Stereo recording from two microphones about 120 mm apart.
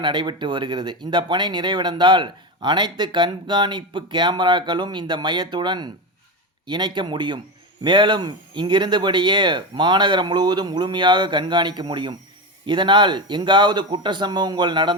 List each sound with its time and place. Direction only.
0.0 s speech: 40° right (ahead or behind)